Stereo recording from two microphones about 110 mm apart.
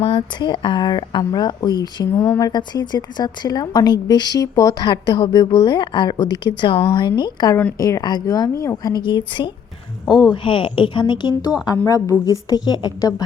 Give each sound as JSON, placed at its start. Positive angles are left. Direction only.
{"t": 0.0, "sound": "a woman's voice", "side_deg": 45}
{"t": 2.1, "sound": "speech", "side_deg": 20}
{"t": 2.5, "sound": "a woman's voice", "side_deg": 40}
{"t": 10.1, "sound": "speech", "side_deg": 0}
{"t": 10.3, "sound": "a woman's voice", "side_deg": 55}
{"t": 11.9, "sound": "a woman's voice", "side_deg": 30}